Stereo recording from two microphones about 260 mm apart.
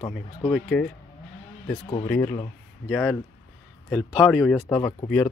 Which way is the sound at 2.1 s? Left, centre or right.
Centre.